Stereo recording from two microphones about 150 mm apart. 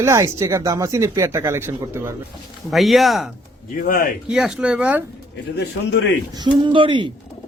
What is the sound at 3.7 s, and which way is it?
Speech, 70° left (ahead or behind).